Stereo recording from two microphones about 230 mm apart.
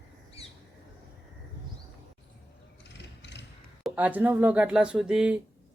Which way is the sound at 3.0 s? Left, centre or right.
Left.